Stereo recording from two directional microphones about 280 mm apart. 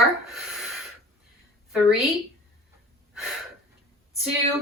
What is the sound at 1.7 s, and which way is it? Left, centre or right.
Speech, centre.